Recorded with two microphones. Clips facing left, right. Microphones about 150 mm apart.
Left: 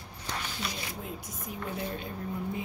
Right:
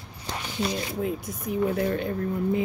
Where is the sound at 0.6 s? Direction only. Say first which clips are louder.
Right 14 dB; 30° right (ahead or behind).